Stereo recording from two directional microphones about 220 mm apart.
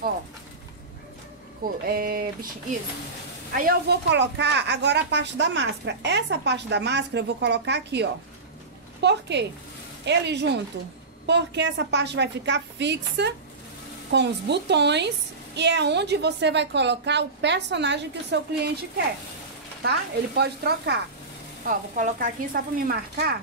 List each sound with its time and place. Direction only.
1.9 s speech: 40° right (ahead or behind)
3.5 s a woman's voice: 45° right (ahead or behind)
19.8 s a woman's voice: 50° right (ahead or behind)
21.6 s speech: 35° right (ahead or behind)